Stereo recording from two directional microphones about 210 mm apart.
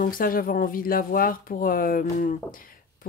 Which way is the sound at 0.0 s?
40° left (ahead or behind).